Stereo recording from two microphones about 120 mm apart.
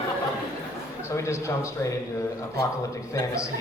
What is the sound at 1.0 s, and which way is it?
A man's voice, 25° left (ahead or behind).